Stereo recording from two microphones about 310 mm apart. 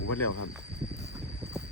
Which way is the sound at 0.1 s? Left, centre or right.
Left.